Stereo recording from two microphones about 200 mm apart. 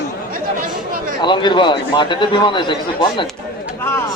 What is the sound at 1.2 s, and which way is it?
A man's voice, 20° left (ahead or behind).